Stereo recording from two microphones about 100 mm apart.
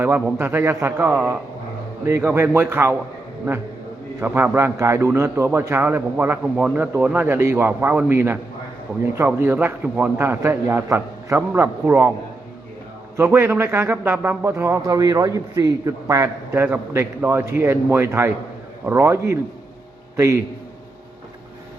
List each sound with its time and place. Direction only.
0.0 s a man's voice: 20° right (ahead or behind)
2.2 s a man's voice: 25° right (ahead or behind)
4.2 s a man's voice: 20° right (ahead or behind)
6.4 s speech: 10° right (ahead or behind)
6.7 s a man's voice: 20° right (ahead or behind)
13.1 s a man's voice: 25° right (ahead or behind)